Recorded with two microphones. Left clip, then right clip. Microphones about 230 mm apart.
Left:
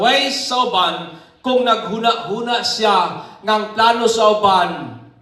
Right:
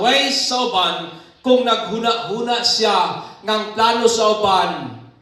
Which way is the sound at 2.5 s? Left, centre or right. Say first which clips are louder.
Left 1 dB; centre.